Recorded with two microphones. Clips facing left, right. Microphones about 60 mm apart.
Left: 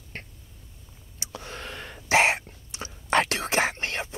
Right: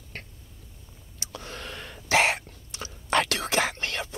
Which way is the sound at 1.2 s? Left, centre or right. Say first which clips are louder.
Left 1 dB; left.